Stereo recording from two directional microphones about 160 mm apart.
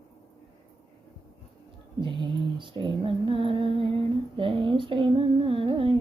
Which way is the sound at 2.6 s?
30° right (ahead or behind).